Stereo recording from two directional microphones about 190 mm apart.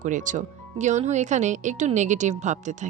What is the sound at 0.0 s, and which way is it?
Speech, 40° right (ahead or behind).